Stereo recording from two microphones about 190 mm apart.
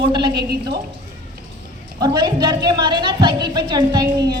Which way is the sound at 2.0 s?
20° right (ahead or behind).